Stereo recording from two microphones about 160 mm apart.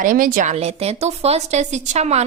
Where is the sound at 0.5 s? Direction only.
40° right (ahead or behind).